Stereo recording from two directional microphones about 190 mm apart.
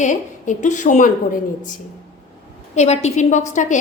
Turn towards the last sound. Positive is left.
turn(degrees=40)  # may be behind; listen again after turning